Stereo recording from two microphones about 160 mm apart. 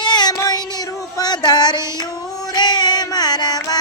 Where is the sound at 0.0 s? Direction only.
25° left (ahead or behind).